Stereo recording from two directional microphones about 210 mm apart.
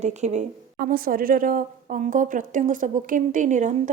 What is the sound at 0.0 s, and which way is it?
A woman's voice, 35° right (ahead or behind).